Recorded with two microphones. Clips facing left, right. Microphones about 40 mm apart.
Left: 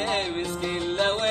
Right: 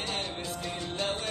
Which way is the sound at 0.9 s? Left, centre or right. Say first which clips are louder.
Left 9 dB; left.